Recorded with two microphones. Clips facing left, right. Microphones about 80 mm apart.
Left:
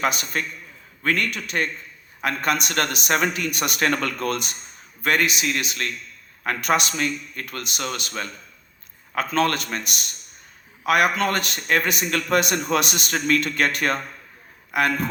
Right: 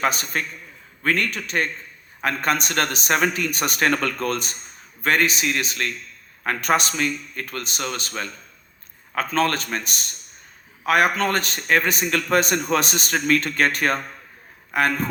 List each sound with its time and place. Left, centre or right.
0.0 s a man's voice: right
9.1 s a man's voice: right